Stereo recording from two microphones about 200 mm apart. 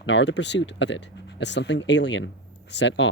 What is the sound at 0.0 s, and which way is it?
Speech, 65° left (ahead or behind).